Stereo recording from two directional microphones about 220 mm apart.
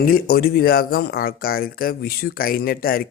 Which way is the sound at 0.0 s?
45° left (ahead or behind).